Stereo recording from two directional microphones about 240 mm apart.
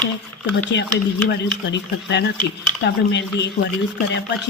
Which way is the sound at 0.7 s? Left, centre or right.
Left.